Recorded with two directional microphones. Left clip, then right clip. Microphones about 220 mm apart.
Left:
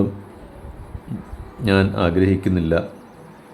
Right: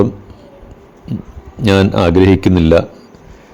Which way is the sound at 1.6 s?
35° right (ahead or behind).